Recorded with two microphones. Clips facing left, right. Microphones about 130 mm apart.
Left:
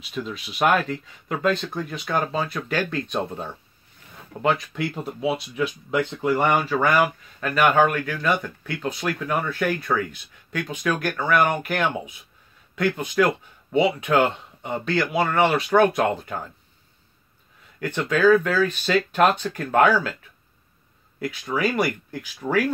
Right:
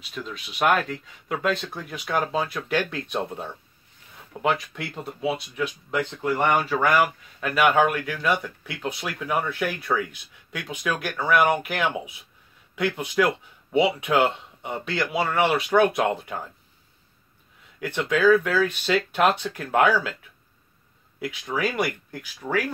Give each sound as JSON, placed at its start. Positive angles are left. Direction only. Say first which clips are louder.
{"t": 0.1, "sound": "speech", "louder": "left 4 dB", "side_deg": 0}
{"t": 17.7, "sound": "speech", "louder": "left 1 dB", "side_deg": -5}
{"t": 21.2, "sound": "speech", "louder": "left 2 dB", "side_deg": 0}